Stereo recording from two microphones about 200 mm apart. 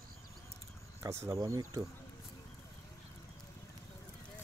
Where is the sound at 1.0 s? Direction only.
15° right (ahead or behind).